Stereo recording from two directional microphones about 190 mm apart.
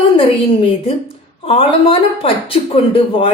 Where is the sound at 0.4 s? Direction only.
30° left (ahead or behind).